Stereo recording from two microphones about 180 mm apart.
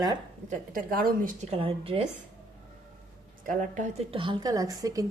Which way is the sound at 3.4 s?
45° right (ahead or behind).